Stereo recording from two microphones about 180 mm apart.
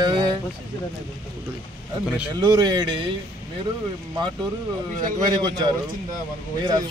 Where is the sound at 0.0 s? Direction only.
25° right (ahead or behind).